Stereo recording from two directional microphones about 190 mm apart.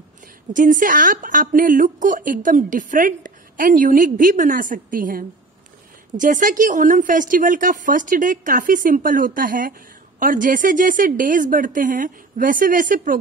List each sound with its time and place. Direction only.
0.5 s a woman's voice: 45° right (ahead or behind)